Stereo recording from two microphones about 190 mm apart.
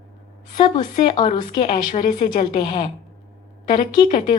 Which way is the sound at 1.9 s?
40° left (ahead or behind).